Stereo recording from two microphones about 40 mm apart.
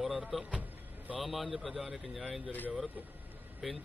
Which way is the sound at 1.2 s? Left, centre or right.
Centre.